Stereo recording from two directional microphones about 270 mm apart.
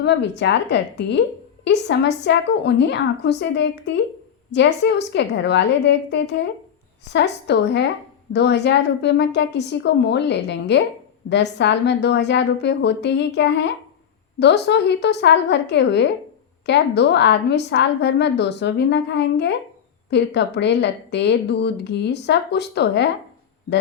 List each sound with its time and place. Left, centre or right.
0.0 s a woman's voice: left